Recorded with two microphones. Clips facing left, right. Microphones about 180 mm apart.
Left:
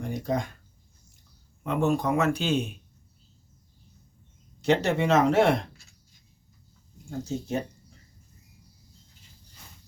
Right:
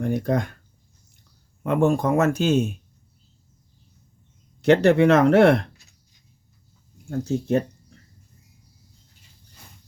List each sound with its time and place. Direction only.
0.0 s speech: 60° right (ahead or behind)
1.6 s speech: 50° right (ahead or behind)
4.6 s speech: 60° right (ahead or behind)
7.1 s speech: 60° right (ahead or behind)